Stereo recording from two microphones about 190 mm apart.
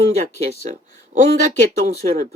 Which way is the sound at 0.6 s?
40° right (ahead or behind).